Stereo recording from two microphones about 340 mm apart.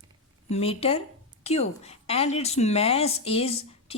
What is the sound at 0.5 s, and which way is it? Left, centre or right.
A woman's voice, centre.